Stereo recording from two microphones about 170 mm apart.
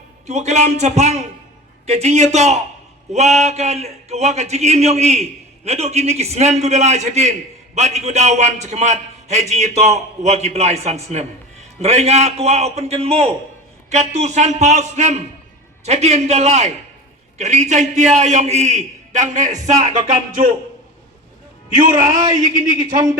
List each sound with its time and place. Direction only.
0.3 s a man's voice: 40° right (ahead or behind)
22.4 s a man's voice: 50° right (ahead or behind)